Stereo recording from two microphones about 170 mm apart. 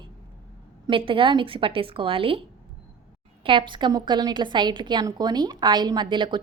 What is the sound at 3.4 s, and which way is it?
A woman's voice, 30° right (ahead or behind).